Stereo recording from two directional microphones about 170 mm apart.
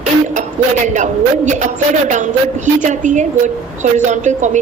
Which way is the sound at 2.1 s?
45° right (ahead or behind).